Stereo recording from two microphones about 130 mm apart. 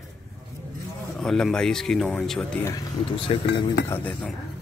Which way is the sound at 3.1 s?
45° left (ahead or behind).